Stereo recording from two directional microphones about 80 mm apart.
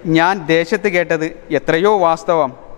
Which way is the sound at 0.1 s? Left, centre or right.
Centre.